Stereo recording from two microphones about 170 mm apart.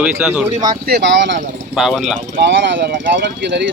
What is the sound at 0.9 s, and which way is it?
Speech, 85° right.